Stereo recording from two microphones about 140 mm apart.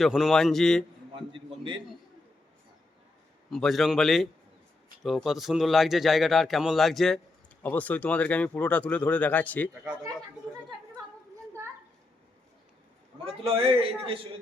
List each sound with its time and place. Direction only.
0.0 s a man's voice: centre (ahead or behind)
1.1 s a man's voice: 35° right (ahead or behind)
3.5 s a man's voice: centre (ahead or behind)
7.6 s speech: 10° left (ahead or behind)
13.4 s a man's voice: 45° right (ahead or behind)